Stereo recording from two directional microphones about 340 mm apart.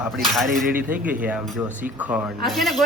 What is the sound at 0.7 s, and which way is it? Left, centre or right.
Speech, right.